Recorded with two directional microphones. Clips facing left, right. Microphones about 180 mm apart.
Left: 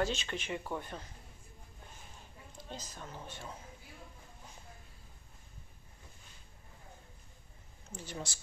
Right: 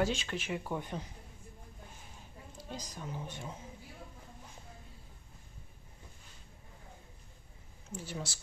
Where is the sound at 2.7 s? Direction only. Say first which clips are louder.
Right 4 dB; 15° right (ahead or behind).